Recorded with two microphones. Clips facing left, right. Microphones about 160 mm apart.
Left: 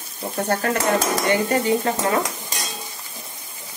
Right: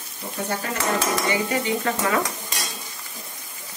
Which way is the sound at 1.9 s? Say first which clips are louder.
Left 2 dB; 30° left (ahead or behind).